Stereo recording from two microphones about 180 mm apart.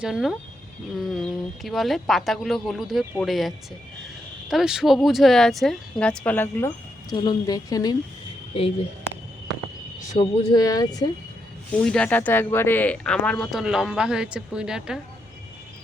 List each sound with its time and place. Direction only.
0.0 s speech: 5° right (ahead or behind)
7.1 s a woman's voice: 20° left (ahead or behind)
9.1 s a sound: 15° left (ahead or behind)
10.1 s speech: 35° left (ahead or behind)
10.5 s a woman's voice: 20° left (ahead or behind)
11.7 s speech: 5° left (ahead or behind)